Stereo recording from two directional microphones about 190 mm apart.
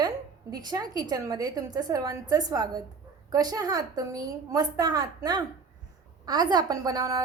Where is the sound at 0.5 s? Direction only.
20° right (ahead or behind).